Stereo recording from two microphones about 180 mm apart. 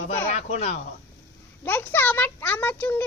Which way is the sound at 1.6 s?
10° left (ahead or behind).